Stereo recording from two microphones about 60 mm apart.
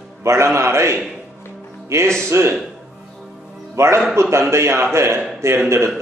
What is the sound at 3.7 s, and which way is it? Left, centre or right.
A man's voice, right.